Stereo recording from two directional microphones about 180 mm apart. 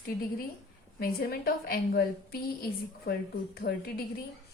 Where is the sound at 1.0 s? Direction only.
55° left (ahead or behind).